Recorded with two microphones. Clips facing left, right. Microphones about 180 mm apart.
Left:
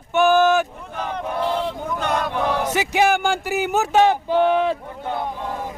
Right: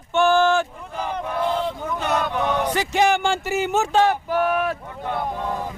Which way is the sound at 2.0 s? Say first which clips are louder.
Even; 5° right (ahead or behind).